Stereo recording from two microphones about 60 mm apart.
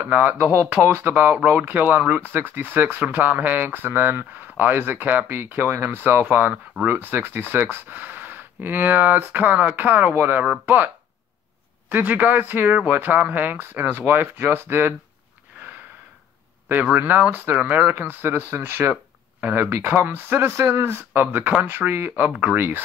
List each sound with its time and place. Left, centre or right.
0.0 s speech: right
11.9 s speech: right
16.9 s speech: right
22.2 s speech: right